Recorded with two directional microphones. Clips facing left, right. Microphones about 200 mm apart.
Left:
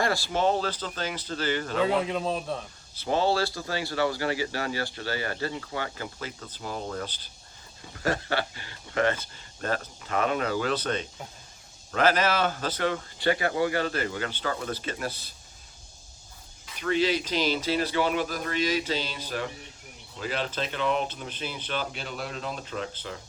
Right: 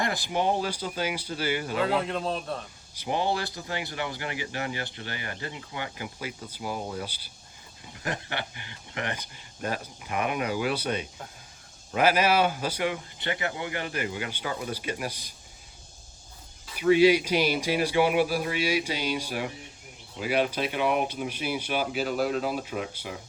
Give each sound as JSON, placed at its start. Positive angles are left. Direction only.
{"t": 0.0, "sound": "speech", "side_deg": -20}
{"t": 2.0, "sound": "a man's voice", "side_deg": 0}
{"t": 2.9, "sound": "speech", "side_deg": -15}
{"t": 16.7, "sound": "speech", "side_deg": -10}